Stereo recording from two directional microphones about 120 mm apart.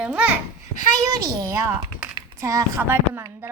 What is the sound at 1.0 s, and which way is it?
Speech, 35° right (ahead or behind).